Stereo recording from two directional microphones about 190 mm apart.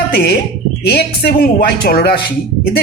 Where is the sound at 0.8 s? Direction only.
55° left (ahead or behind).